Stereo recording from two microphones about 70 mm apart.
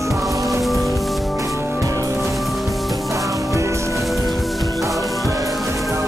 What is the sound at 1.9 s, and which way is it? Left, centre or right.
Music, right.